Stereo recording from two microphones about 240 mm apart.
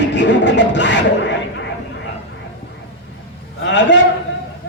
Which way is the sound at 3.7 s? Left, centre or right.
Left.